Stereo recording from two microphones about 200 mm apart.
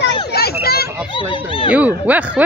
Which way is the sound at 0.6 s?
50° left (ahead or behind).